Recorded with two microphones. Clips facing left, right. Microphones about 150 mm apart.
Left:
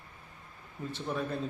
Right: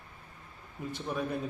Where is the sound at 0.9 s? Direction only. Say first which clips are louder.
Even; 10° right (ahead or behind).